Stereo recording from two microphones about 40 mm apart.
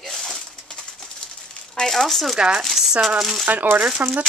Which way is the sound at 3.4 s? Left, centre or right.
Right.